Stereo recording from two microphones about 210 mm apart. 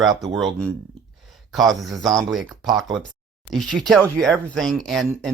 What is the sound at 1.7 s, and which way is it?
Speech, centre (ahead or behind).